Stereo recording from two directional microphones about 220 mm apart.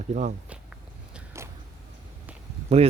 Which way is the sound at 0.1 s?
35° right (ahead or behind).